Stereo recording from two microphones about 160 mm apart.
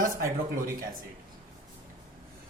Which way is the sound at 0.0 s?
60° right (ahead or behind).